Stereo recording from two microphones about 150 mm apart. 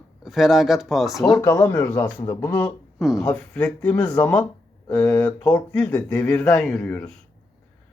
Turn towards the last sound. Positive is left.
turn(degrees=5)  # may be behind; listen again after turning